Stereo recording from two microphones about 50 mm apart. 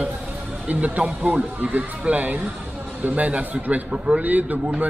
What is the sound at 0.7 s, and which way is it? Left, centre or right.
A man's voice, right.